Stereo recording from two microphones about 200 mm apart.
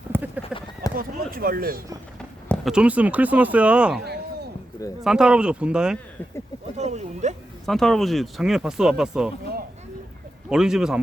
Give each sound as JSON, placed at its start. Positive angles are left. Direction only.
{"t": 0.1, "sound": "clip-clop", "side_deg": -10}
{"t": 0.9, "sound": "a sound", "side_deg": -45}
{"t": 2.5, "sound": "speech", "side_deg": 0}
{"t": 5.0, "sound": "speech", "side_deg": -5}
{"t": 6.7, "sound": "a sound", "side_deg": -35}
{"t": 7.6, "sound": "speech", "side_deg": 0}
{"t": 10.5, "sound": "speech", "side_deg": -5}